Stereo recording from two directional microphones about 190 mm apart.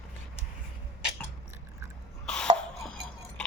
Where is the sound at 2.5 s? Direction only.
5° left (ahead or behind).